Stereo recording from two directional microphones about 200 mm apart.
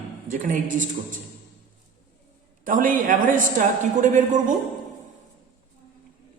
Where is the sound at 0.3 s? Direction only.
40° right (ahead or behind).